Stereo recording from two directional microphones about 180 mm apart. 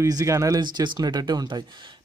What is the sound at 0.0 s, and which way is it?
Speech, 15° right (ahead or behind).